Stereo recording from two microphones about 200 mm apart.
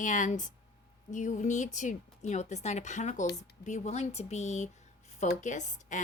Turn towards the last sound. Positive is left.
turn(degrees=35)  # may be behind; listen again after turning